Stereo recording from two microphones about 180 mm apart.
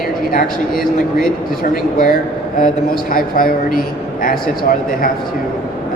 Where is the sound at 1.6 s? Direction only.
50° left (ahead or behind).